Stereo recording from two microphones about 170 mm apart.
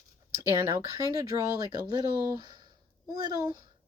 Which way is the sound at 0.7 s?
20° right (ahead or behind).